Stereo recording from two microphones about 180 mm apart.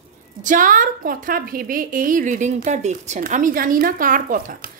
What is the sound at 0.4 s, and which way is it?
A woman's voice, 45° right (ahead or behind).